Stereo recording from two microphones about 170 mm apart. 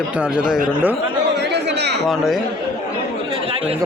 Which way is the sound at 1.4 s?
85° right.